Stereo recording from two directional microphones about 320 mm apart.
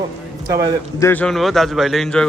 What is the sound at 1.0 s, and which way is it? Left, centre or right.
A man's voice, centre.